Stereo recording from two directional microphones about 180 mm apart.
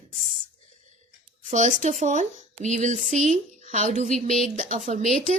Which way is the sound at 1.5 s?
45° right (ahead or behind).